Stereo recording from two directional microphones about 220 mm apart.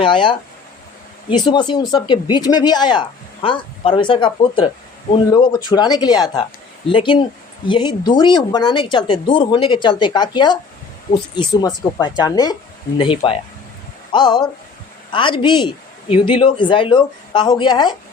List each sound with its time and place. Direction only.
0.0 s speech: 20° left (ahead or behind)